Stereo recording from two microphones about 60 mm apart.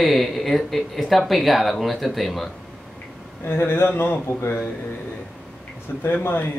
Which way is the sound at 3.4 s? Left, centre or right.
Left.